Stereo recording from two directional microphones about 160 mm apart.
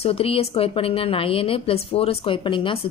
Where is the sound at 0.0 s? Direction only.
35° left (ahead or behind).